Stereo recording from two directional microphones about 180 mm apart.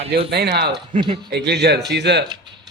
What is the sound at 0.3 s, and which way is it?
Speech, 65° right (ahead or behind).